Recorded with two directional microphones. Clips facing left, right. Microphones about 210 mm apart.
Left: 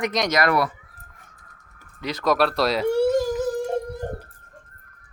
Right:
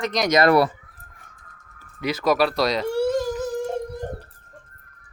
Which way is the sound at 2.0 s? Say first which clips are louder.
Right 1 dB; 5° right (ahead or behind).